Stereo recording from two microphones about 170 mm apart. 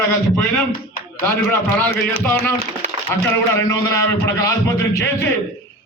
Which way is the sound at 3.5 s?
20° left (ahead or behind).